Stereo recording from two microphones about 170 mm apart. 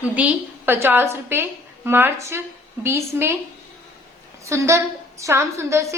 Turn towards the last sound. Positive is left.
turn(degrees=-15)  # may be behind; listen again after turning